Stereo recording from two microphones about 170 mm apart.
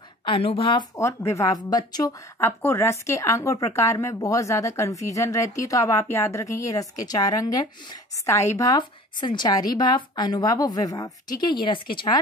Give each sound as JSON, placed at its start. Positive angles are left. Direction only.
{"t": 0.2, "sound": "a woman's voice", "side_deg": 30}
{"t": 0.9, "sound": "a woman's voice", "side_deg": 15}